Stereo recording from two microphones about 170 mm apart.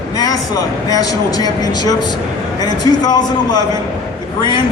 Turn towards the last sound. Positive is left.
turn(degrees=25)  # may be behind; listen again after turning